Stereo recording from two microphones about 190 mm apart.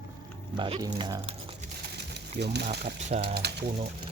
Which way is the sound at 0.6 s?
25° right (ahead or behind).